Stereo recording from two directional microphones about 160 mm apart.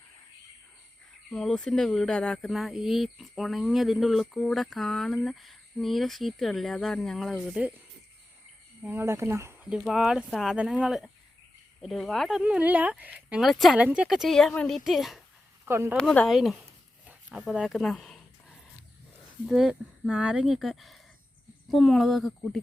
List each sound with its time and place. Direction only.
1.3 s speech: 5° left (ahead or behind)
8.8 s speech: 10° right (ahead or behind)
9.6 s speech: 5° right (ahead or behind)
15.6 s speech: 15° right (ahead or behind)
16.0 s speech: 5° left (ahead or behind)
17.1 s a sound: 5° right (ahead or behind)
19.5 s speech: 5° right (ahead or behind)